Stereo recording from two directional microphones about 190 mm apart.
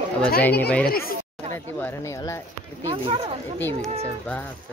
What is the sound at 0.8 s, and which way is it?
Speech, 50° left (ahead or behind).